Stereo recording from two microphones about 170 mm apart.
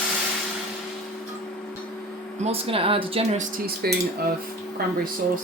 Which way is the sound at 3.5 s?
60° right (ahead or behind).